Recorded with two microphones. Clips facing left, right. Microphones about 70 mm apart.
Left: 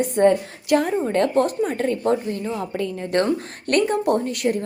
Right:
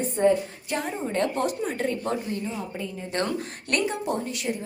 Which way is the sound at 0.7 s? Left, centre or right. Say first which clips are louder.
Left 9 dB; left.